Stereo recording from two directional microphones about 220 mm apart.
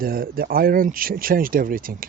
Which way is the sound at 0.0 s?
40° right (ahead or behind).